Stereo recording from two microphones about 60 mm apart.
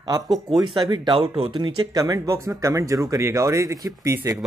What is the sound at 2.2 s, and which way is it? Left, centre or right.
Speech, right.